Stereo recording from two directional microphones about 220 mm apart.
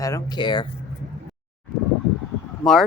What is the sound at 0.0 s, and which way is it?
Speech, 15° left (ahead or behind).